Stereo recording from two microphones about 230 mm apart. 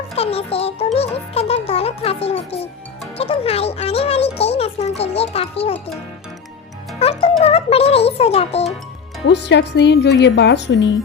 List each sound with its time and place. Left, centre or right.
0.2 s a child's voice: left
7.0 s a child's voice: left
9.2 s speech: left